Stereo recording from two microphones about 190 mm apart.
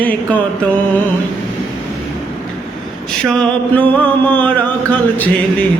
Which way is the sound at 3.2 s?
5° left (ahead or behind).